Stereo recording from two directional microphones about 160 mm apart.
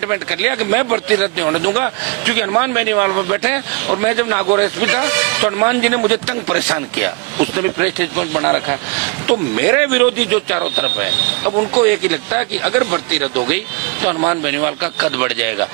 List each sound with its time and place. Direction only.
0.1 s speech: 10° right (ahead or behind)